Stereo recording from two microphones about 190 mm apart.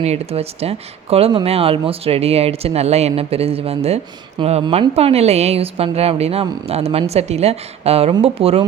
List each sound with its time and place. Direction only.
0.0 s speech: 35° right (ahead or behind)